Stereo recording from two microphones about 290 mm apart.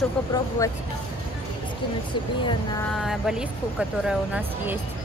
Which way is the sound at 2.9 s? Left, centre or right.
Centre.